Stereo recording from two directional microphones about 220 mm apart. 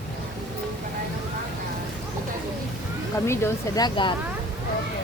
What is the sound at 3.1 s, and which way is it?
Speech, 10° left (ahead or behind).